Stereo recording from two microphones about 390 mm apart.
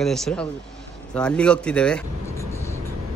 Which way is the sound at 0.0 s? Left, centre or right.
Centre.